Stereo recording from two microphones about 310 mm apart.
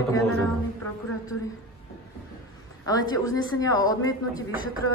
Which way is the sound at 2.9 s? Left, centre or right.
Centre.